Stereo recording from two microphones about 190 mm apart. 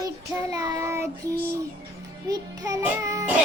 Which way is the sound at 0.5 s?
20° right (ahead or behind).